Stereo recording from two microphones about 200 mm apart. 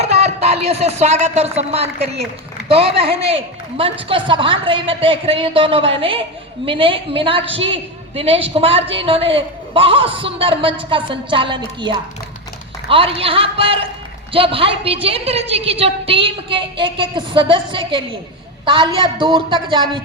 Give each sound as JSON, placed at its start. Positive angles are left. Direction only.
{"t": 0.0, "sound": "a woman's voice", "side_deg": -30}